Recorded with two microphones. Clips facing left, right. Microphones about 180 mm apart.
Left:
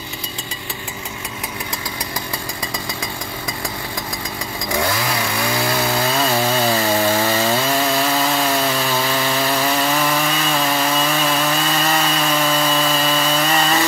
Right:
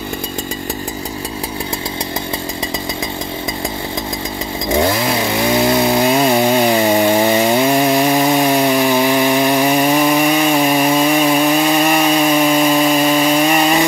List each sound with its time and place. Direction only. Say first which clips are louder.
4.6 s chainsaw: right 6 dB; 25° right (ahead or behind)